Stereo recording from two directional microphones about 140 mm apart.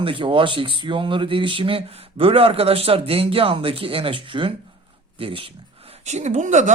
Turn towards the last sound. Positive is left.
turn(degrees=-60)  # may be behind; listen again after turning